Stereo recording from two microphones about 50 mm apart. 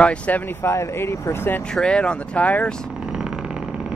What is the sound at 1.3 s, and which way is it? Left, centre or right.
Speech, left.